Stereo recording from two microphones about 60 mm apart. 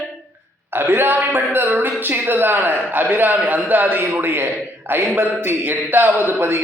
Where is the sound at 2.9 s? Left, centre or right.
Right.